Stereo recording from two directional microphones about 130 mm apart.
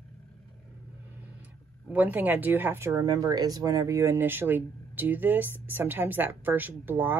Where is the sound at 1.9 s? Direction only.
10° right (ahead or behind).